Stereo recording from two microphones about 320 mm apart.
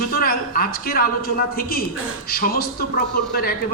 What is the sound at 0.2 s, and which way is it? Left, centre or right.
A man's voice, left.